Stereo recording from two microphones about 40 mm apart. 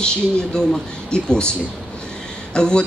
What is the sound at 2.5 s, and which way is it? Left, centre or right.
Speech, left.